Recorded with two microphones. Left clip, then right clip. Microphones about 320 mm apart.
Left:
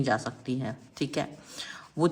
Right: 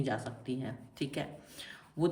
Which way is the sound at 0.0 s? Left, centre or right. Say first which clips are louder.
Left 8 dB; centre.